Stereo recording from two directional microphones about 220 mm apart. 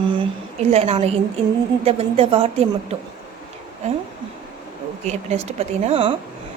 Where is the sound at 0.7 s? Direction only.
30° right (ahead or behind).